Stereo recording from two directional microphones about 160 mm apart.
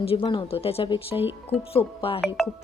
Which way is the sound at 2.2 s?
5° left (ahead or behind).